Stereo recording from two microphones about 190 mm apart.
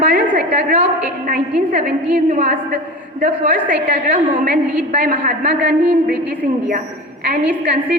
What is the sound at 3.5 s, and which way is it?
Speech, 5° right (ahead or behind).